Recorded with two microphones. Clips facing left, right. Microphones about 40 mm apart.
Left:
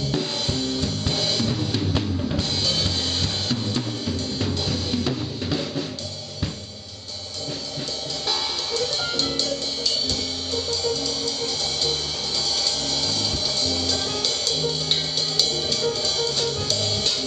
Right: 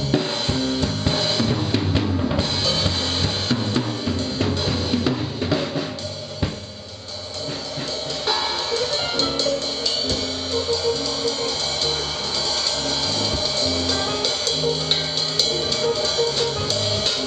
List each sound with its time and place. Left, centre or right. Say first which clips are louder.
0.1 s drum kit: right 6 dB; centre
3.5 s drum: right 4 dB; right
8.3 s music: right 4 dB; centre
13.2 s music: right 3 dB; centre